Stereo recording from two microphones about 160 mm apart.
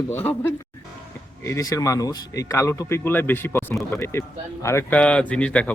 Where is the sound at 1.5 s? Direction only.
20° left (ahead or behind).